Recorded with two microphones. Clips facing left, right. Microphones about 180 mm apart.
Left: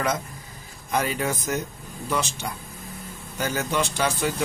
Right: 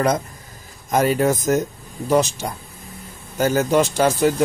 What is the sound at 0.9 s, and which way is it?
A man's voice, 45° right (ahead or behind).